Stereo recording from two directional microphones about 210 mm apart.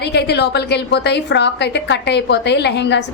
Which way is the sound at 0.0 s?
50° left (ahead or behind).